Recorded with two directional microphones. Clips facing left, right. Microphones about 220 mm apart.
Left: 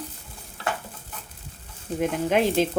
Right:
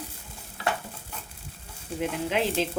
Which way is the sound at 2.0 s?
50° left (ahead or behind).